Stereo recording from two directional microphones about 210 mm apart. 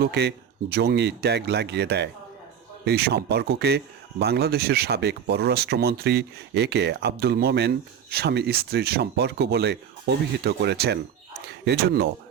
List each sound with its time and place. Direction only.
0.0 s speech: 50° right (ahead or behind)